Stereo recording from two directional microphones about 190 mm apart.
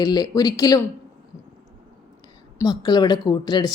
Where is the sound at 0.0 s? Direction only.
20° left (ahead or behind).